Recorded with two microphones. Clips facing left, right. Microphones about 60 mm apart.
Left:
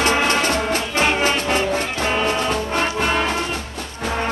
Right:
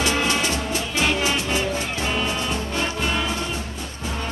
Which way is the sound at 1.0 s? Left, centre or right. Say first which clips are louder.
Left 3 dB; left.